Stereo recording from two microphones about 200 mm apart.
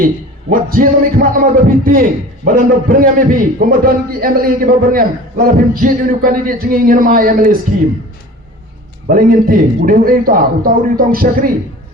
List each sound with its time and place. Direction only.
0.5 s a man's voice: 45° right (ahead or behind)
9.0 s a man's voice: 45° right (ahead or behind)